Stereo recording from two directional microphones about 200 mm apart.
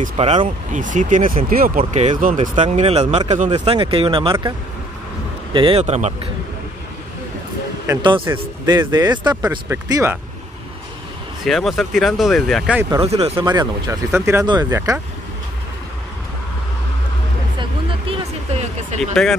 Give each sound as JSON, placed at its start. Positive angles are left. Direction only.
{"t": 0.0, "sound": "speech", "side_deg": -30}
{"t": 7.8, "sound": "speech", "side_deg": -20}
{"t": 11.4, "sound": "speech", "side_deg": 0}
{"t": 13.0, "sound": "speech", "side_deg": -30}
{"t": 17.6, "sound": "music", "side_deg": -25}